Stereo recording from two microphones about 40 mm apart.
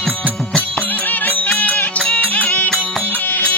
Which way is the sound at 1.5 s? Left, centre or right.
Left.